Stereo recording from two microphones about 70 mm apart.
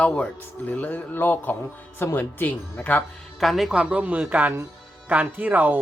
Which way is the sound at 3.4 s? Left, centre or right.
Centre.